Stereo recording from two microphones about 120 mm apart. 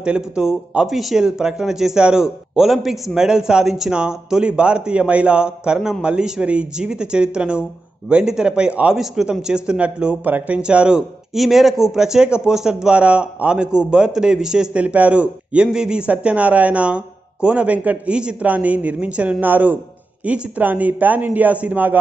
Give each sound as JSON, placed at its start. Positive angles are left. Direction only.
{"t": 0.0, "sound": "a man's voice", "side_deg": -5}